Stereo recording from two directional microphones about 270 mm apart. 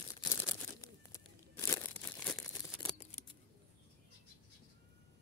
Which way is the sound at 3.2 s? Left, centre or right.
Left.